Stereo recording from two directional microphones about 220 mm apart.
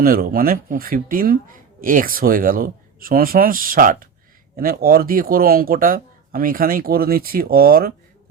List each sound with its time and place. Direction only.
0.0 s speech: 40° right (ahead or behind)